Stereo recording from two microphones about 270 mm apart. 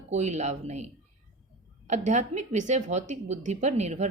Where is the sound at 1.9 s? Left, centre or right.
Right.